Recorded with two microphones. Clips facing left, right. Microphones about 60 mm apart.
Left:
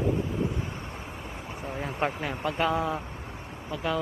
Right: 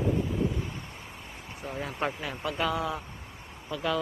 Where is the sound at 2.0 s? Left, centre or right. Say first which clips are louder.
Left 4 dB; left.